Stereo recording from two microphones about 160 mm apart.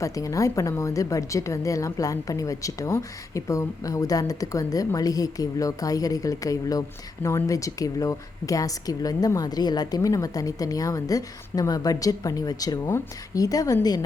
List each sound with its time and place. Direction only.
0.0 s a woman's voice: 20° left (ahead or behind)